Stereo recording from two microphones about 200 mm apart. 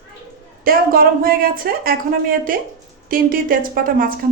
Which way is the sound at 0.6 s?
45° right (ahead or behind).